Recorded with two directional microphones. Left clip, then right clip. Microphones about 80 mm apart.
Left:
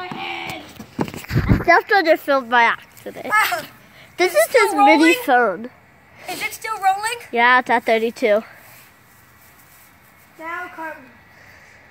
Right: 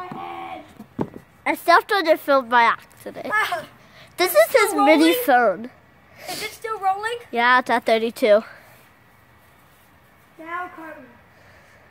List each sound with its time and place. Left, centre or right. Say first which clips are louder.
0.2 s a sound: left 6 dB; right
1.7 s speech: left 2 dB; centre
3.0 s a woman's voice: left 4 dB; centre
6.1 s a sound: left 4 dB; centre
6.6 s a woman's voice: left 3 dB; centre
7.2 s speech: left 3 dB; centre
8.0 s speech: right 1 dB; right
10.8 s a woman's voice: left 7 dB; right